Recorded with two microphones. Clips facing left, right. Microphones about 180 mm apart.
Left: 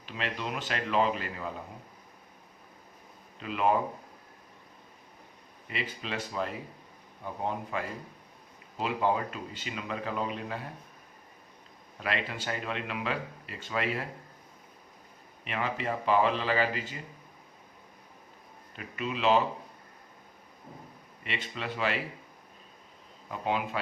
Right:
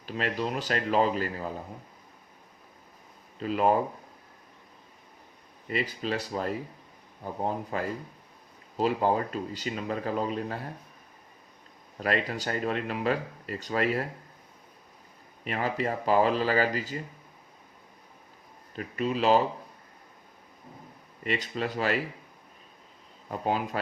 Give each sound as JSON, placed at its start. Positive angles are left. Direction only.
{"t": 0.0, "sound": "speech", "side_deg": -40}
{"t": 3.4, "sound": "speech", "side_deg": -40}
{"t": 5.6, "sound": "speech", "side_deg": -40}
{"t": 11.9, "sound": "speech", "side_deg": -40}
{"t": 15.4, "sound": "speech", "side_deg": -40}
{"t": 18.8, "sound": "speech", "side_deg": -40}
{"t": 21.2, "sound": "speech", "side_deg": -40}
{"t": 23.3, "sound": "speech", "side_deg": -40}